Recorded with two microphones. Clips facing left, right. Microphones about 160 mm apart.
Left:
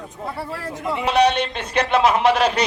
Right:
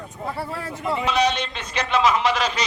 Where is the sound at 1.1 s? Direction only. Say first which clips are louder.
Left 6 dB; 60° left (ahead or behind).